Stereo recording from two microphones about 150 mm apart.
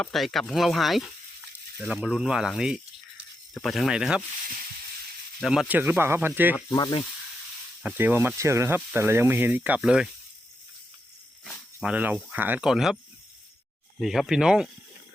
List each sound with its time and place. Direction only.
0.0 s speech: centre (ahead or behind)
5.4 s speech: 5° right (ahead or behind)
6.7 s speech: 25° left (ahead or behind)
7.8 s speech: 10° right (ahead or behind)
11.8 s speech: 10° right (ahead or behind)
14.0 s speech: centre (ahead or behind)